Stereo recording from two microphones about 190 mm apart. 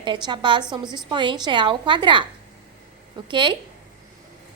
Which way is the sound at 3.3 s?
25° right (ahead or behind).